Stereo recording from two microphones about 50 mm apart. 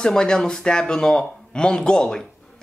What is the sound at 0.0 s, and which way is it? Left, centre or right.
Speech, centre.